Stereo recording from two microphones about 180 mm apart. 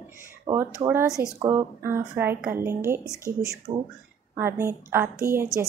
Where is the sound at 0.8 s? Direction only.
15° right (ahead or behind).